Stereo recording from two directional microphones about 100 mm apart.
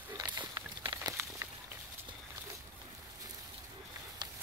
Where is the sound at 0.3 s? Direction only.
45° right (ahead or behind).